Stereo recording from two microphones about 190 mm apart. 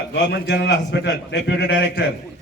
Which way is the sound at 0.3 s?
65° left (ahead or behind).